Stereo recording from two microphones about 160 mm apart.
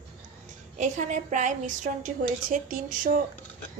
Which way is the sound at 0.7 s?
50° right (ahead or behind).